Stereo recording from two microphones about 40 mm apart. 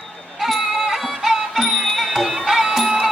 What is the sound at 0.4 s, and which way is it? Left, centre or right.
Music, centre.